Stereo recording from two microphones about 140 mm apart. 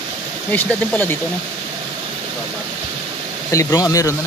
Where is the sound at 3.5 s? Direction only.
25° left (ahead or behind).